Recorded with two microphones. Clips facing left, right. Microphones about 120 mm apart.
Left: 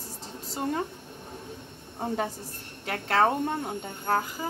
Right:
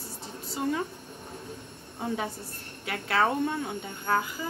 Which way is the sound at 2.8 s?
40° left (ahead or behind).